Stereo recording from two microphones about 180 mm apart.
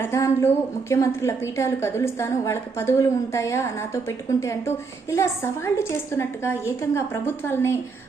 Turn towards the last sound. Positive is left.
turn(degrees=15)  # may be behind; listen again after turning